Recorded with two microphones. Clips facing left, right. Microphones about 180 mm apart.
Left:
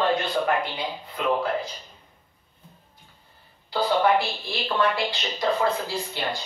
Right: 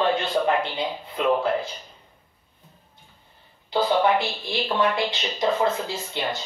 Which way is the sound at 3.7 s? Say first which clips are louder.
Right 1 dB; 20° right (ahead or behind).